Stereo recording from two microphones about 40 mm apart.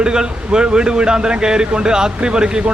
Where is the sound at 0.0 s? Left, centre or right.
Right.